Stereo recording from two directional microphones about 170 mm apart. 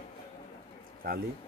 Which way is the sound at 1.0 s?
60° right (ahead or behind).